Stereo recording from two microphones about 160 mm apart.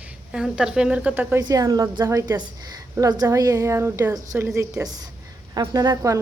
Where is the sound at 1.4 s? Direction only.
20° right (ahead or behind).